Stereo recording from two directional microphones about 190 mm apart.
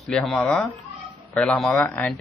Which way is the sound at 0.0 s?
Centre (ahead or behind).